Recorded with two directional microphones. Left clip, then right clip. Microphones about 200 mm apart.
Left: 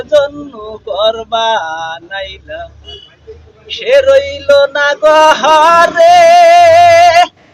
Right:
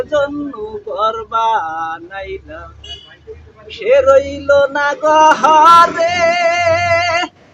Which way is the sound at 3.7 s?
15° right (ahead or behind).